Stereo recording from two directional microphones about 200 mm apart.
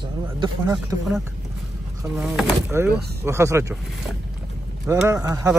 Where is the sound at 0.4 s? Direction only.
20° right (ahead or behind).